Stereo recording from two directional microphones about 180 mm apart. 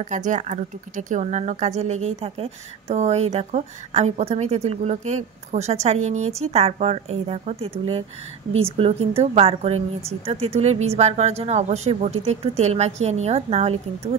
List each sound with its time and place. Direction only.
0.0 s speech: 45° right (ahead or behind)